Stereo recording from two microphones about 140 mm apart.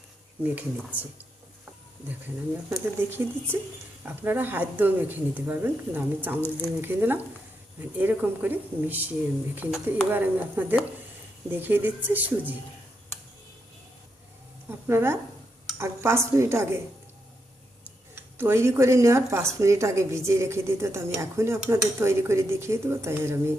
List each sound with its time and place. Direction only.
0.4 s speech: 10° right (ahead or behind)
2.0 s speech: 15° right (ahead or behind)
10.1 s speech: 15° right (ahead or behind)
14.7 s speech: 15° right (ahead or behind)
18.1 s speech: 15° right (ahead or behind)